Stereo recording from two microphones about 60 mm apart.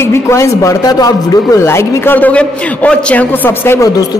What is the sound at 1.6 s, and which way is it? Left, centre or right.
Speech, left.